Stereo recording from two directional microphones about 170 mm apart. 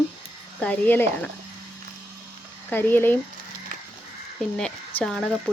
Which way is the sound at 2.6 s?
10° left (ahead or behind).